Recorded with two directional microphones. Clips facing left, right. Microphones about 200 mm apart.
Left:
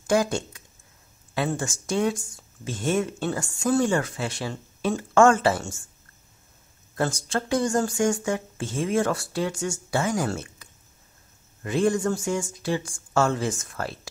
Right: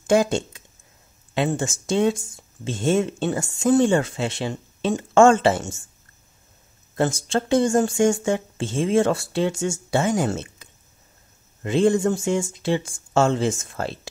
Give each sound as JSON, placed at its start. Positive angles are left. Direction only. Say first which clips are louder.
{"t": 0.0, "sound": "speech", "louder": "right 4 dB", "side_deg": -25}
{"t": 7.0, "sound": "speech", "louder": "right 4 dB", "side_deg": -25}